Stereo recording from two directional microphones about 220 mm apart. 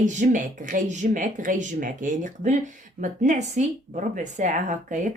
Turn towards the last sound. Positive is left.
turn(degrees=-35)  # may be behind; listen again after turning